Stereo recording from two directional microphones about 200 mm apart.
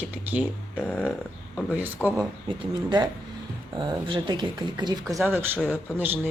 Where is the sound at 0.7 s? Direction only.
5° left (ahead or behind).